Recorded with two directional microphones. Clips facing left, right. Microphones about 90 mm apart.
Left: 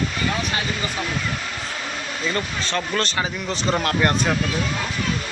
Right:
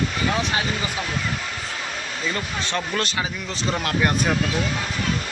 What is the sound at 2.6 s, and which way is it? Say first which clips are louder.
Speech: left 1 dB; 20° right (ahead or behind).